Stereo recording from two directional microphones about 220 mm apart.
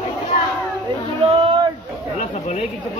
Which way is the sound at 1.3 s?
25° right (ahead or behind).